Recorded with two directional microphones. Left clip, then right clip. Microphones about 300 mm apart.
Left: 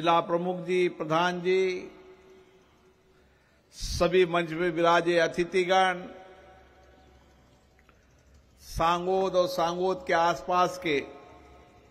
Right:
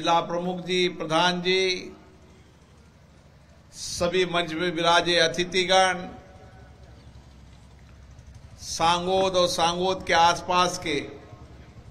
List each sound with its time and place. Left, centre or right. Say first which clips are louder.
0.0 s speech: right 1 dB; left
3.7 s speech: left 1 dB; left
8.7 s speech: right 3 dB; left